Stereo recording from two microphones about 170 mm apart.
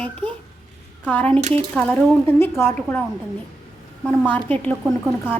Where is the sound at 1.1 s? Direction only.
10° left (ahead or behind).